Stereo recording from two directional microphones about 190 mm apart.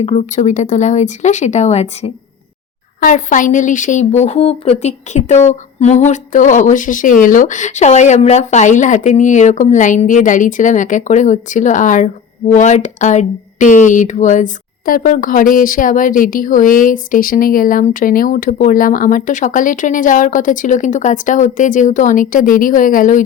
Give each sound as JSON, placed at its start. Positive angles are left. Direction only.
{"t": 0.0, "sound": "speech", "side_deg": 35}